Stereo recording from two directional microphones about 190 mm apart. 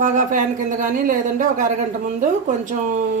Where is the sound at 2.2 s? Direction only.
40° right (ahead or behind).